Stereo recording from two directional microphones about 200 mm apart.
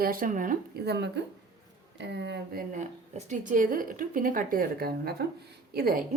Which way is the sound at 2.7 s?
40° right (ahead or behind).